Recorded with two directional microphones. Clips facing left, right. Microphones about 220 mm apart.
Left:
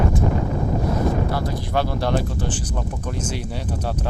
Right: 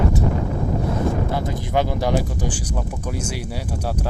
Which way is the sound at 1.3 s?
20° right (ahead or behind).